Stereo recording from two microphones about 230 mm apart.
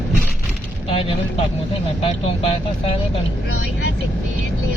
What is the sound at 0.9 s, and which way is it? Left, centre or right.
Vehicle, left.